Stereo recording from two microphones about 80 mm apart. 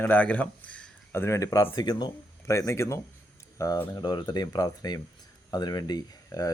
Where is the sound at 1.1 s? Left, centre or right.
Left.